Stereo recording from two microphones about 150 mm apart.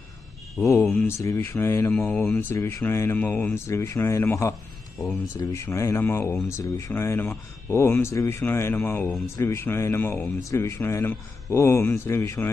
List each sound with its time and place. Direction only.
0.6 s speech: 15° left (ahead or behind)